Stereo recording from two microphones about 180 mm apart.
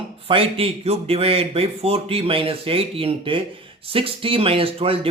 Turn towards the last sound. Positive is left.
turn(degrees=-30)  # may be behind; listen again after turning